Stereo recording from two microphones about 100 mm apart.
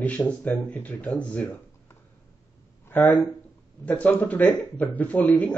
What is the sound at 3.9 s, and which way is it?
Speech, 15° left (ahead or behind).